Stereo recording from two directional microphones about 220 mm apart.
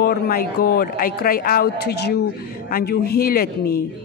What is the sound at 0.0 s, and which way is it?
A woman's voice, 45° left (ahead or behind).